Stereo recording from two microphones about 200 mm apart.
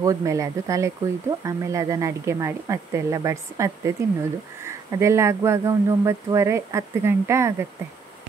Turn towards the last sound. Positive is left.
turn(degrees=-15)  # may be behind; listen again after turning